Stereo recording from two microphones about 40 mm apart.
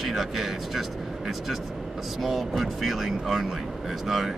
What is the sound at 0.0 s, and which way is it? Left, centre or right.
Speech, centre.